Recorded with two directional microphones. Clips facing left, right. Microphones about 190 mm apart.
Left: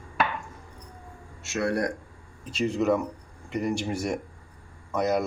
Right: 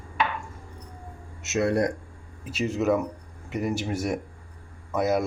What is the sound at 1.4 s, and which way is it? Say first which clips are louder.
Speech: right 3 dB; 20° right (ahead or behind).